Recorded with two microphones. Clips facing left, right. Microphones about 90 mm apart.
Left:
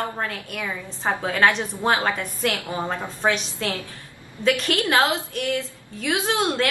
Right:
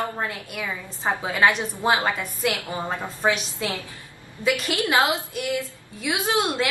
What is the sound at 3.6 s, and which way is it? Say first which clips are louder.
A woman's voice: left 1 dB; 10° right (ahead or behind).